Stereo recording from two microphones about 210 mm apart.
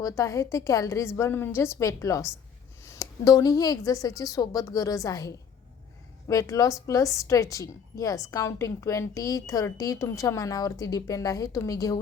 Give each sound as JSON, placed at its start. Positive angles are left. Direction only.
{"t": 0.0, "sound": "a woman's voice", "side_deg": 15}